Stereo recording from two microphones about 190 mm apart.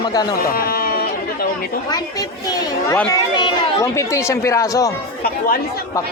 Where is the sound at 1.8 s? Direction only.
20° left (ahead or behind).